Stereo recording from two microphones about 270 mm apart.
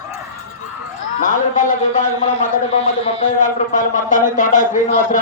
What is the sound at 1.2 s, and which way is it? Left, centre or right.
A man's voice, left.